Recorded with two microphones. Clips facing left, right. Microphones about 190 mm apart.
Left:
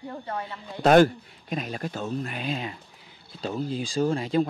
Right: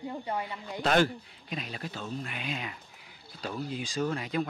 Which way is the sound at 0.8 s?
45° left (ahead or behind).